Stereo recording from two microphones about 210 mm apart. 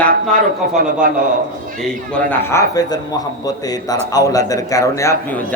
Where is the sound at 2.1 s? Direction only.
10° left (ahead or behind).